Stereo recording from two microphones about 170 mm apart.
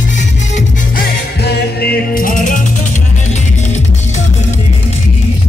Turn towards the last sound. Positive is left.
turn(degrees=40)  # may be behind; listen again after turning